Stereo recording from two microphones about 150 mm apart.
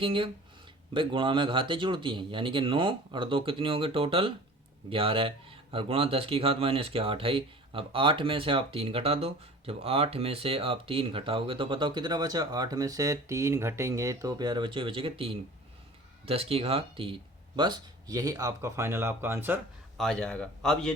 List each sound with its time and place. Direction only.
0.0 s speech: 35° right (ahead or behind)
17.6 s speech: 25° right (ahead or behind)
20.0 s a man's voice: 5° left (ahead or behind)